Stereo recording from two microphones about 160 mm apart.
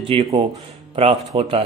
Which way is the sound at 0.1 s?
35° right (ahead or behind).